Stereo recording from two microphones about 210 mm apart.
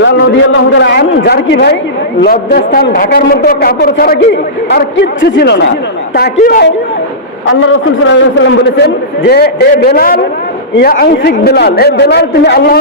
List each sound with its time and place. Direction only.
0.0 s a man's voice: 55° left (ahead or behind)
6.3 s a man's voice: 40° left (ahead or behind)
7.4 s a man's voice: 65° left (ahead or behind); by 12.8 s 50° left (ahead or behind)